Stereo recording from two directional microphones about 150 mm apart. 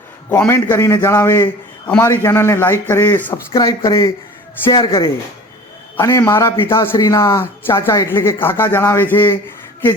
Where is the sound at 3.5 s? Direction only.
25° left (ahead or behind).